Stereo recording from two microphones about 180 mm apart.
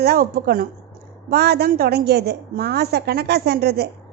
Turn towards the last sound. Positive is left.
turn(degrees=-65)  # may be behind; listen again after turning